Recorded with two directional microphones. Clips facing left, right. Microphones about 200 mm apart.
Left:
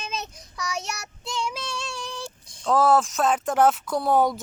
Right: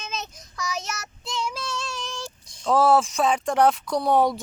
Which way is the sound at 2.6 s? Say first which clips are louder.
Right 1 dB; centre (ahead or behind).